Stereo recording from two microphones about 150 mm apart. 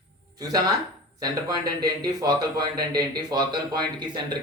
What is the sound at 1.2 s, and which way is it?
Speech, 25° right (ahead or behind).